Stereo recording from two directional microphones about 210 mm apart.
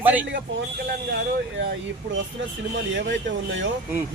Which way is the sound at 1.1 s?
50° right (ahead or behind).